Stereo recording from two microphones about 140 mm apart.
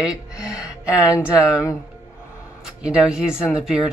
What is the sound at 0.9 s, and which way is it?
Speech, 20° left (ahead or behind).